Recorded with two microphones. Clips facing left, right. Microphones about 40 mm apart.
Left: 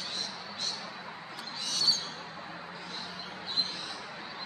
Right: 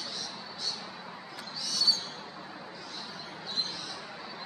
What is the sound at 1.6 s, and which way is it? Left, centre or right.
Owl, left.